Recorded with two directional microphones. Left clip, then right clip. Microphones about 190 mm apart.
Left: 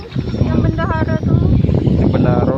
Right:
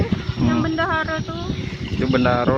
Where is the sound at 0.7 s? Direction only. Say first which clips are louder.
Left 1 dB; 50° right (ahead or behind).